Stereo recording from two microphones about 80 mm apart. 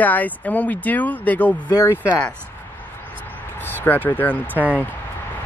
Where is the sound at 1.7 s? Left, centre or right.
Left.